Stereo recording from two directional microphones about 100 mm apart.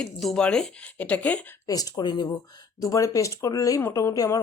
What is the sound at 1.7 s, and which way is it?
Speech, 40° left (ahead or behind).